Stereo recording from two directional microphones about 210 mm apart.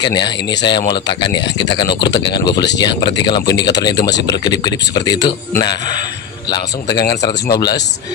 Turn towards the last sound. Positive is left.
turn(degrees=20)  # may be behind; listen again after turning